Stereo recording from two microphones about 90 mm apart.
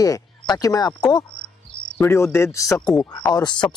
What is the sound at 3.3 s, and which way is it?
Speech, 55° left (ahead or behind).